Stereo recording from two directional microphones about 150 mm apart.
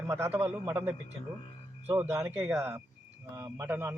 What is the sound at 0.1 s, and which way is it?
Speech, 15° right (ahead or behind).